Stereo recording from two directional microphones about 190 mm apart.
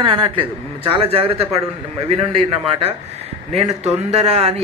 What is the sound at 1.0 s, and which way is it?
Speech, 30° right (ahead or behind).